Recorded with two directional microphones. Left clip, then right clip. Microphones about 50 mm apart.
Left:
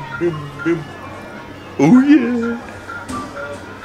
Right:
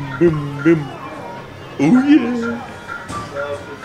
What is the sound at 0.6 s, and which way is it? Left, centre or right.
Speech, right.